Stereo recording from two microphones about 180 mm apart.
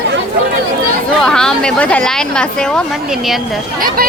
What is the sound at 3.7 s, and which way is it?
Speech, 55° right (ahead or behind).